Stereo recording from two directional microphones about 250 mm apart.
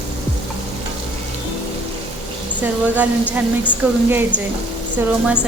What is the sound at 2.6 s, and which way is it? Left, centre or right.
A woman's voice, centre.